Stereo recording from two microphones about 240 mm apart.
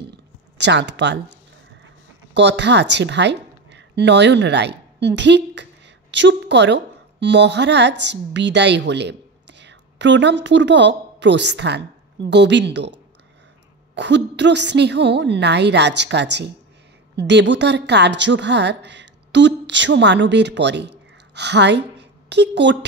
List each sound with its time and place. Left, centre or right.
0.6 s a woman's voice: right
2.3 s a woman's voice: right
13.9 s a woman's voice: right